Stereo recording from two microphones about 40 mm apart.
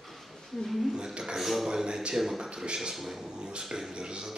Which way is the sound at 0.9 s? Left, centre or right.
Centre.